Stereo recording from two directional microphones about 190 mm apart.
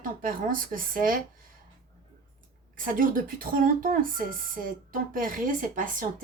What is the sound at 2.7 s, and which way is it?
Speech, 45° right (ahead or behind).